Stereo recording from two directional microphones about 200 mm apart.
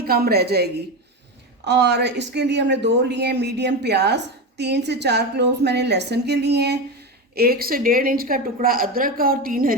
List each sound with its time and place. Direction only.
0.0 s a woman's voice: 50° right (ahead or behind)